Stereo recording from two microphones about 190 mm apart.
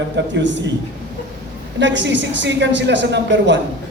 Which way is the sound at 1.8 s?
70° right (ahead or behind).